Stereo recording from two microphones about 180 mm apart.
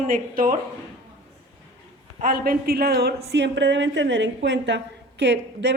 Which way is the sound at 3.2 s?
70° right (ahead or behind).